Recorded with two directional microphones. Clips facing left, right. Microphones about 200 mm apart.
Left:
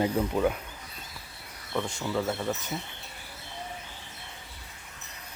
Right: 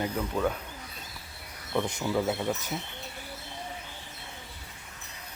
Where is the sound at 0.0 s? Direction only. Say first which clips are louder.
Left 4 dB; 25° left (ahead or behind).